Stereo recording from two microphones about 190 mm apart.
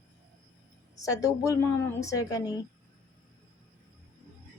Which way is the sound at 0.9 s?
15° left (ahead or behind).